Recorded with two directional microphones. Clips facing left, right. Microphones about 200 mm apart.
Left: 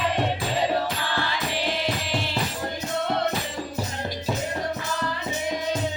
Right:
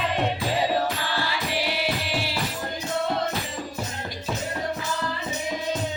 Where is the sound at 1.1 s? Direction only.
10° right (ahead or behind).